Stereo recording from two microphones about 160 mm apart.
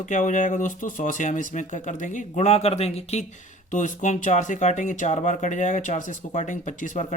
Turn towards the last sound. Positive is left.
turn(degrees=50)  # may be behind; listen again after turning